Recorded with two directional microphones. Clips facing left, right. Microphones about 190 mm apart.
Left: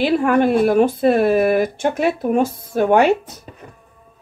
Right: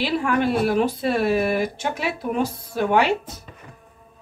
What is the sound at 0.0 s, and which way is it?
Speech, 50° left (ahead or behind).